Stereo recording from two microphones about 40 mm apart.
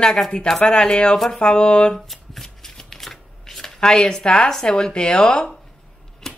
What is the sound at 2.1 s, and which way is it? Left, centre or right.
Shuffling cards, centre.